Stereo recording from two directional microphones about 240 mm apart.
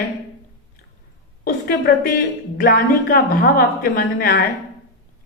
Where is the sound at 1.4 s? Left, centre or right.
Left.